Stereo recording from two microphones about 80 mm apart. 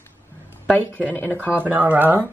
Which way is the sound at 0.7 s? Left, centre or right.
Left.